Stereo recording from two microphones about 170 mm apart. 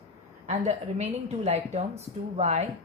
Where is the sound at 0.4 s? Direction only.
40° right (ahead or behind).